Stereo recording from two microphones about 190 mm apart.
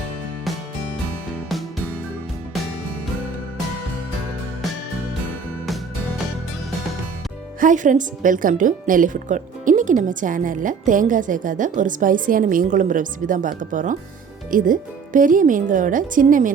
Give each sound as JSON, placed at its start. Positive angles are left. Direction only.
{"t": 7.6, "sound": "a woman's voice", "side_deg": -40}